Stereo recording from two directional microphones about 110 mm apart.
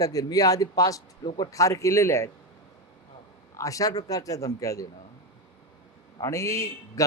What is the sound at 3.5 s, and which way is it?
A man's voice, 30° left (ahead or behind).